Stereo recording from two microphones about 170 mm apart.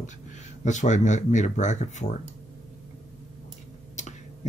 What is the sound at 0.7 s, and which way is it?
Speech, 45° left (ahead or behind).